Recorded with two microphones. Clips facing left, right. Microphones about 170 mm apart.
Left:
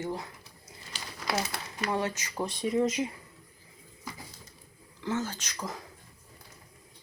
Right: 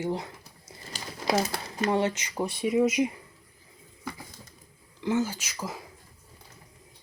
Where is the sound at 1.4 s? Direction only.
35° right (ahead or behind); by 2.4 s 20° right (ahead or behind).